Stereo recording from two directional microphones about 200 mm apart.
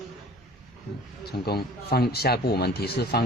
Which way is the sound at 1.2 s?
55° left (ahead or behind).